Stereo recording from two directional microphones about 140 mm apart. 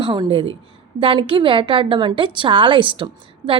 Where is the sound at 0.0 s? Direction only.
35° right (ahead or behind).